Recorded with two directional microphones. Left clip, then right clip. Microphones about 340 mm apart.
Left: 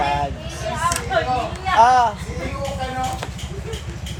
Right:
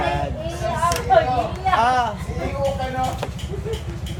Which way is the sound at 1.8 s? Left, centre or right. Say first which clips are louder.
Left 7 dB; centre.